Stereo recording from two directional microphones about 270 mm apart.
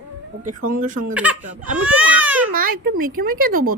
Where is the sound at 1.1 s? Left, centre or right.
Centre.